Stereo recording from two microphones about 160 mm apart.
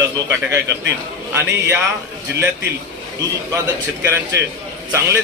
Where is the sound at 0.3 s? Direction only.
15° right (ahead or behind).